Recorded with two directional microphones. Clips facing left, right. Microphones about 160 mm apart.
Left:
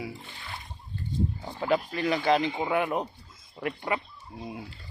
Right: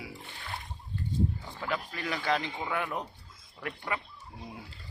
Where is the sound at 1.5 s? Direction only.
25° left (ahead or behind).